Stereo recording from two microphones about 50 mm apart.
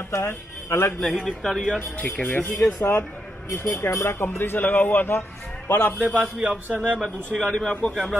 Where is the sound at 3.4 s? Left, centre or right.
Left.